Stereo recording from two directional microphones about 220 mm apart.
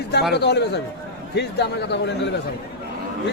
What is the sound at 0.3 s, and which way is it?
A man's voice, 50° left (ahead or behind).